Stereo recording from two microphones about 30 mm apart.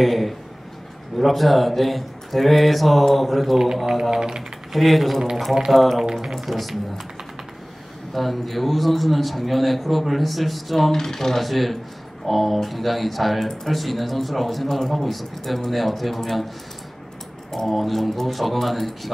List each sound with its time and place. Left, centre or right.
0.0 s a man's voice: centre
4.1 s speech: right
4.7 s a man's voice: centre
8.1 s a man's voice: centre
10.9 s speech: centre
11.4 s a man's voice: centre
17.5 s a man's voice: centre